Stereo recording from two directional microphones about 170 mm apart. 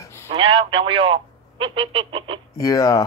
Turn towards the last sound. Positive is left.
turn(degrees=20)  # may be behind; listen again after turning